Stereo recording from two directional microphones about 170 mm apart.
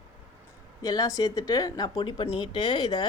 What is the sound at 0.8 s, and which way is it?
Speech, 20° left (ahead or behind).